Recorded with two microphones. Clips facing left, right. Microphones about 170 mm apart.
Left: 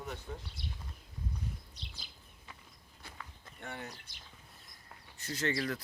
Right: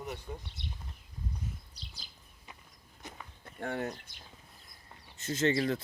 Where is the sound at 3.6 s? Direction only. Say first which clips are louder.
Right 9 dB; 55° right (ahead or behind).